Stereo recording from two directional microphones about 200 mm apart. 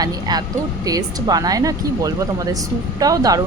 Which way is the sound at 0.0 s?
20° right (ahead or behind).